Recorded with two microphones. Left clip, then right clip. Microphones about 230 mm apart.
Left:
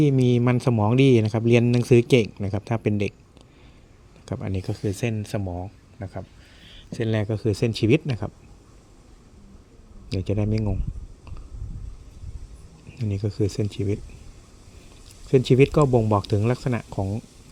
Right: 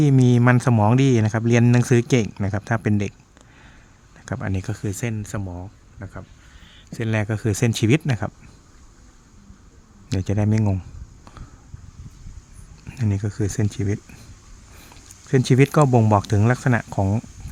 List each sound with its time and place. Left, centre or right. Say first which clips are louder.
0.2 s speech: right 3 dB; centre
4.3 s speech: right 2 dB; centre
10.1 s speech: right 2 dB; centre
13.1 s speech: left 3 dB; centre
15.3 s speech: left 1 dB; centre